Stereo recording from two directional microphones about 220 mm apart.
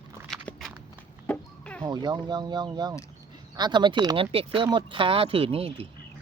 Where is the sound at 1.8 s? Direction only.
20° right (ahead or behind).